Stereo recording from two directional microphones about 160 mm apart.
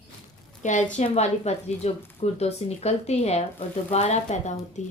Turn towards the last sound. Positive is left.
turn(degrees=45)  # may be behind; listen again after turning